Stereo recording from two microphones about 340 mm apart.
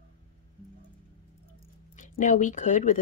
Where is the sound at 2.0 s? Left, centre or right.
Left.